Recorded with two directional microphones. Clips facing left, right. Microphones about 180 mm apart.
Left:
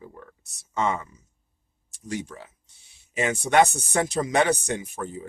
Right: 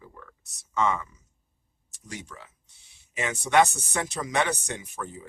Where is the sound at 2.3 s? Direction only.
35° left (ahead or behind).